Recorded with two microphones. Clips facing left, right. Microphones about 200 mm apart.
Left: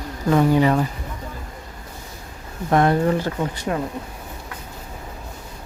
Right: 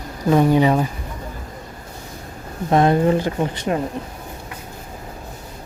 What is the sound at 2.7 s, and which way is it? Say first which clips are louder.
Speech: right 2 dB; 20° right (ahead or behind).